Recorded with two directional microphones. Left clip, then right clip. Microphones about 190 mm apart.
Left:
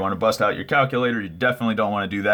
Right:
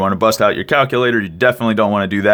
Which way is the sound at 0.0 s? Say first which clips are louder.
Right 7 dB; 55° right (ahead or behind).